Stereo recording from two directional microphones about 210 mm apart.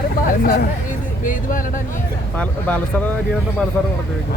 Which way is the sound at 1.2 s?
40° left (ahead or behind).